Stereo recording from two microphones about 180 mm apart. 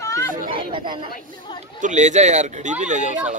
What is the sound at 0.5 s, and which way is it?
Speech, 30° right (ahead or behind).